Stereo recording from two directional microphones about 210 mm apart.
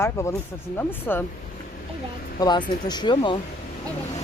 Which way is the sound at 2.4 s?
20° left (ahead or behind).